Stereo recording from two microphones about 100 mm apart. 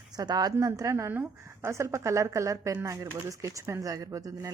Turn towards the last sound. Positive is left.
turn(degrees=-35)  # may be behind; listen again after turning